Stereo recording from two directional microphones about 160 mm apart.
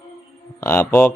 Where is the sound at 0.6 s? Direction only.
15° left (ahead or behind).